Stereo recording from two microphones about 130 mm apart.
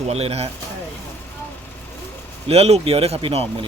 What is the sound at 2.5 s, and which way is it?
A man's voice, 50° right (ahead or behind).